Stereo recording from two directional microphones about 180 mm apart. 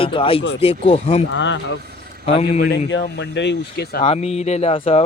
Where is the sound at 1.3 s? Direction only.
85° left.